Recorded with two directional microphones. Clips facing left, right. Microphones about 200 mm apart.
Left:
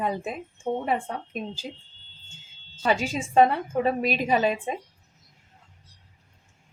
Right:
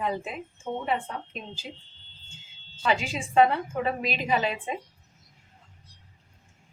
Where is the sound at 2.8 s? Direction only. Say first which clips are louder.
Left 2 dB; 40° left (ahead or behind).